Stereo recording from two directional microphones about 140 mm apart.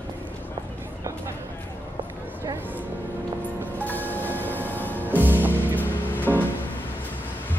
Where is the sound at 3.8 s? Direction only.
10° left (ahead or behind).